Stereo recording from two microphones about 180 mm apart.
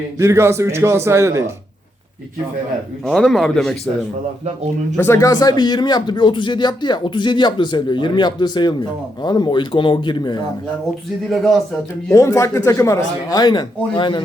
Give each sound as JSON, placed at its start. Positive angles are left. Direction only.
{"t": 0.2, "sound": "a man's voice", "side_deg": -15}
{"t": 3.1, "sound": "a man's voice", "side_deg": 0}
{"t": 4.9, "sound": "speech", "side_deg": 15}
{"t": 11.3, "sound": "a man's voice", "side_deg": 0}
{"t": 12.1, "sound": "speech", "side_deg": 15}